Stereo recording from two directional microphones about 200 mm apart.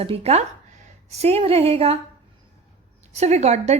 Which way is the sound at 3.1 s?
35° right (ahead or behind).